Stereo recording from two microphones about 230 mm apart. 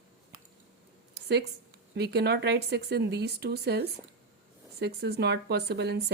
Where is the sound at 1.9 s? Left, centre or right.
Right.